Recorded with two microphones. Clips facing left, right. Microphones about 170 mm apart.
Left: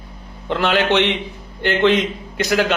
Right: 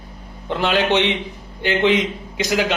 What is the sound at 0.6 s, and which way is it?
A man's voice, 15° right (ahead or behind).